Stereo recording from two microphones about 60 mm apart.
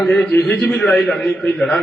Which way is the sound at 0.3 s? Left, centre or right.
Centre.